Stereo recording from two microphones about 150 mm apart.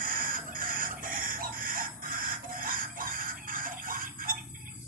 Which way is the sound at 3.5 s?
65° right (ahead or behind).